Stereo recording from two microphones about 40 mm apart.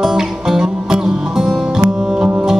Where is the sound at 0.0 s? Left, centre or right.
Centre.